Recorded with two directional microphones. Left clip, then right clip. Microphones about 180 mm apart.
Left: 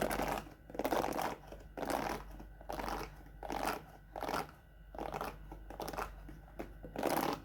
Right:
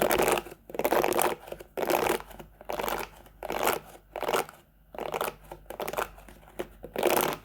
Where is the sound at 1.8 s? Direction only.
45° right (ahead or behind).